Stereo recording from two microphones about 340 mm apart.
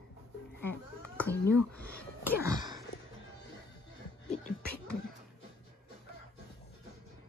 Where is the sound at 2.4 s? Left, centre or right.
Centre.